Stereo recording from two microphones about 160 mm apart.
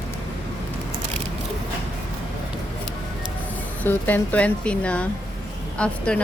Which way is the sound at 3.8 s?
10° left (ahead or behind).